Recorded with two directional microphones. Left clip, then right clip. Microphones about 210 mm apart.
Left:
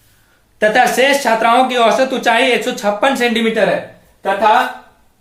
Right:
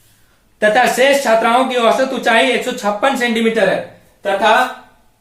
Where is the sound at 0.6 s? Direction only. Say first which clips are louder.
Even; 35° left (ahead or behind).